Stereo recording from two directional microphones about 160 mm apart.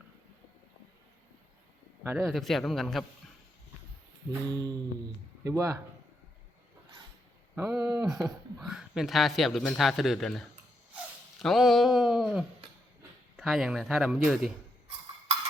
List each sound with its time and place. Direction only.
2.1 s speech: centre (ahead or behind)
4.3 s mantra: 25° right (ahead or behind)
5.4 s speech: 20° right (ahead or behind)
7.5 s speech: 5° right (ahead or behind)
11.4 s speech: centre (ahead or behind)